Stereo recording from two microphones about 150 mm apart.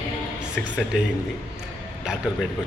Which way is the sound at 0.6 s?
5° left (ahead or behind).